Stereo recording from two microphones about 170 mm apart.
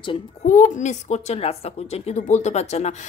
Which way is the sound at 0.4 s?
50° left (ahead or behind).